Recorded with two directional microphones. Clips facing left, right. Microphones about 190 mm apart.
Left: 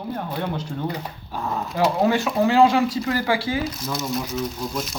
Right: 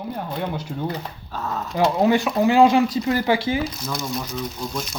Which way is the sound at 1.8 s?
15° right (ahead or behind).